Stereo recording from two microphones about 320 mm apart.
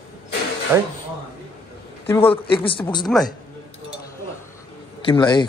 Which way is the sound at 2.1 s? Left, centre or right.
Centre.